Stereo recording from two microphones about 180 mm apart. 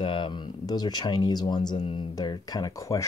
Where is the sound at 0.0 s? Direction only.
25° left (ahead or behind).